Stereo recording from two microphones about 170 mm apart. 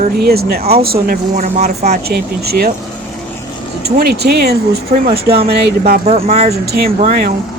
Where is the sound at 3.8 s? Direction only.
65° right (ahead or behind).